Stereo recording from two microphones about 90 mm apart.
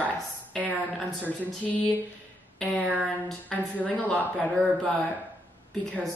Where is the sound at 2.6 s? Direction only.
10° left (ahead or behind).